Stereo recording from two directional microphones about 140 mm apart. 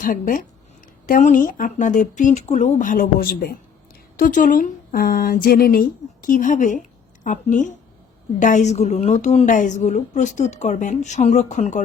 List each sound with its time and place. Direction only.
0.0 s speech: 75° left (ahead or behind); by 3.6 s 90° left
4.2 s a woman's voice: 65° left (ahead or behind)
9.5 s a woman's voice: 65° left (ahead or behind)